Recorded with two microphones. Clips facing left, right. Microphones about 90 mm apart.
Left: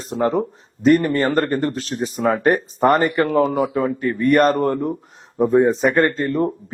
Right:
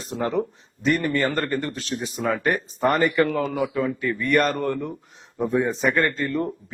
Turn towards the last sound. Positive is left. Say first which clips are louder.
# left 5 dB
turn(degrees=35)  # may be behind; listen again after turning